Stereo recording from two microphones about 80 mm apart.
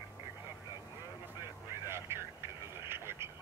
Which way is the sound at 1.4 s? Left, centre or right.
Right.